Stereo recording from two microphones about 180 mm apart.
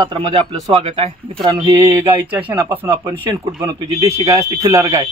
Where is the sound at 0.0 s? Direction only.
25° right (ahead or behind).